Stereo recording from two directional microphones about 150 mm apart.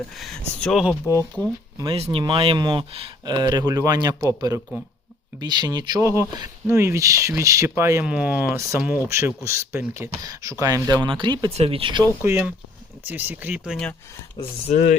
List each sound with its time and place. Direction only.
0.1 s speech: centre (ahead or behind)
1.0 s speech: 20° right (ahead or behind)
2.1 s speech: 35° right (ahead or behind); by 8.0 s 20° right (ahead or behind)
8.0 s speech: 10° right (ahead or behind); by 12.0 s 35° right (ahead or behind)
12.2 s speech: 15° right (ahead or behind)
14.4 s speech: 25° left (ahead or behind)
14.7 s speech: 55° left (ahead or behind)